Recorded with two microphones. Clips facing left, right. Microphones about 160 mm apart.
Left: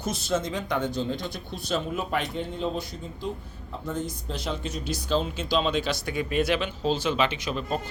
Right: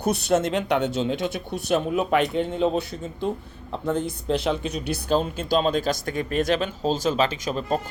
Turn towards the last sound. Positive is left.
turn(degrees=-40)  # may be behind; listen again after turning